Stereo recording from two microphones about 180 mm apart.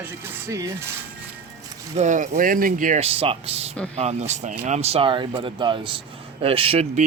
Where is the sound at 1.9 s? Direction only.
40° right (ahead or behind).